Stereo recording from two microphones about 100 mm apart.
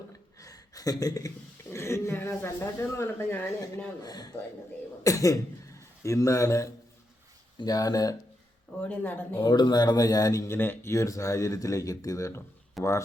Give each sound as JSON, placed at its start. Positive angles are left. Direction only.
{"t": 0.3, "sound": "a sound", "side_deg": 35}
{"t": 1.7, "sound": "speech", "side_deg": 25}
{"t": 4.0, "sound": "a man's voice", "side_deg": 40}
{"t": 8.8, "sound": "speech", "side_deg": 15}
{"t": 9.4, "sound": "speech", "side_deg": 45}
{"t": 10.5, "sound": "speech", "side_deg": 25}
{"t": 12.8, "sound": "speech", "side_deg": 0}